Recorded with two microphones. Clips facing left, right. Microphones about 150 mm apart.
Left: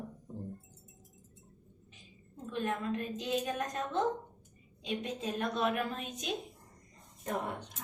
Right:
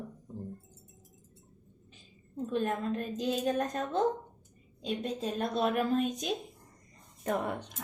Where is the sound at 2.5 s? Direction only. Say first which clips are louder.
Right 3 dB; 40° right (ahead or behind).